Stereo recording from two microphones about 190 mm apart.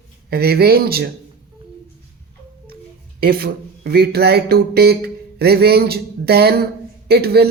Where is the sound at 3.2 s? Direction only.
55° right (ahead or behind).